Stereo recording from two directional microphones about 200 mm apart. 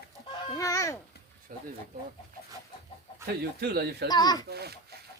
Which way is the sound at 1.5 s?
45° right (ahead or behind).